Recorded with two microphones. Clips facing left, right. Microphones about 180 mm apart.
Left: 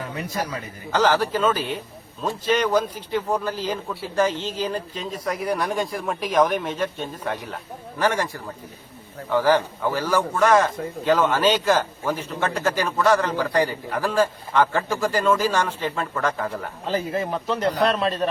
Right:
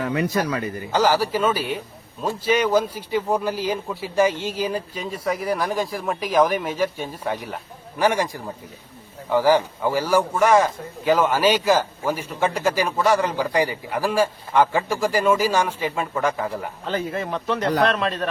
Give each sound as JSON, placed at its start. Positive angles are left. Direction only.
{"t": 0.0, "sound": "a man's voice", "side_deg": -80}
{"t": 0.9, "sound": "a man's voice", "side_deg": -10}
{"t": 16.8, "sound": "a man's voice", "side_deg": 30}